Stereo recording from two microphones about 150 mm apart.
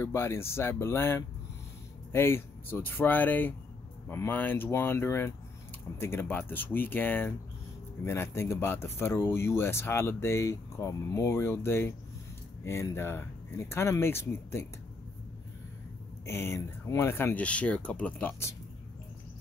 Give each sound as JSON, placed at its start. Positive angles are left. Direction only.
{"t": 0.0, "sound": "speech", "side_deg": 15}
{"t": 16.3, "sound": "speech", "side_deg": 15}